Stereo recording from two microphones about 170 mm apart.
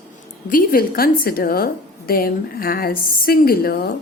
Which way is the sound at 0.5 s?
60° left (ahead or behind).